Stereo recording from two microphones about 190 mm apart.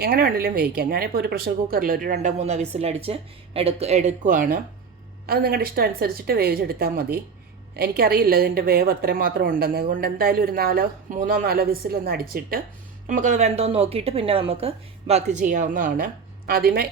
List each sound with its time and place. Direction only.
0.0 s a woman's voice: 50° right (ahead or behind)